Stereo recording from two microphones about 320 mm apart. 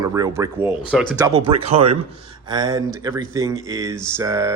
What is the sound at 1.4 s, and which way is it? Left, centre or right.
Speech, centre.